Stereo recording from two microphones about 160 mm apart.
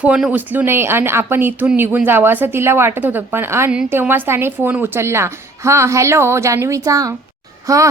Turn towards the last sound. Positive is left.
turn(degrees=-20)  # may be behind; listen again after turning